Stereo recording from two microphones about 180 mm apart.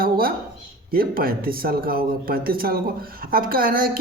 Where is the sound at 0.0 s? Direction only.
55° right (ahead or behind).